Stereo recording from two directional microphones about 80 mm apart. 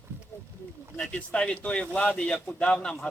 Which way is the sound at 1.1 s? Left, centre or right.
Centre.